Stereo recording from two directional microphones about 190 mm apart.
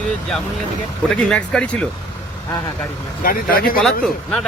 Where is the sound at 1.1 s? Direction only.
5° left (ahead or behind).